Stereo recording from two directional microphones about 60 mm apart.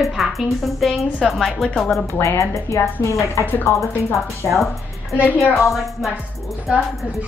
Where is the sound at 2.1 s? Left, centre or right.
Left.